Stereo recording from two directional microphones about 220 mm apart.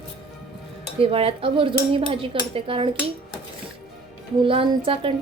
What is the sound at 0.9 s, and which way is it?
Speech, 25° right (ahead or behind).